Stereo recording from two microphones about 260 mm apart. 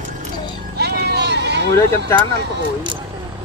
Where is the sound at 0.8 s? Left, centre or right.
Right.